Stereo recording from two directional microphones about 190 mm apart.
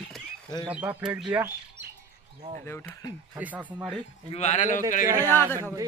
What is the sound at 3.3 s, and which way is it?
Speech, 10° right (ahead or behind).